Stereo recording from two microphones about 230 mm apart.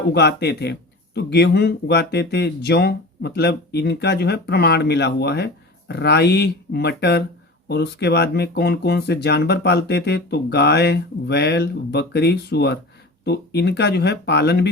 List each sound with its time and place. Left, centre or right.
0.1 s a man's voice: left